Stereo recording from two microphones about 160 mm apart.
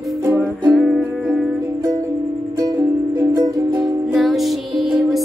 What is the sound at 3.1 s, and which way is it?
Music, 20° right (ahead or behind).